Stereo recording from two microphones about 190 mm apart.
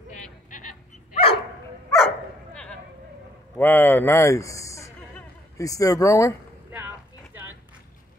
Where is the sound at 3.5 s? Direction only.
10° left (ahead or behind).